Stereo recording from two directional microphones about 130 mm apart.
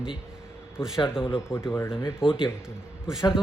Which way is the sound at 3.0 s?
5° right (ahead or behind).